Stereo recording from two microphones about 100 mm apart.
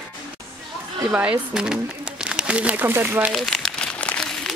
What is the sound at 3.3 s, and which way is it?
Crumpling, centre (ahead or behind).